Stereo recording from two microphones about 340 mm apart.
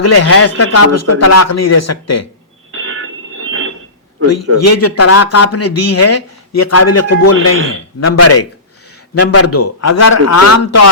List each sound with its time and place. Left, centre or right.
0.0 s speech: left
2.7 s a sound: right
4.5 s speech: left